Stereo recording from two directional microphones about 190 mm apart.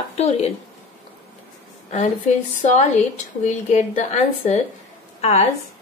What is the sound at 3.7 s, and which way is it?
Speech, 35° left (ahead or behind).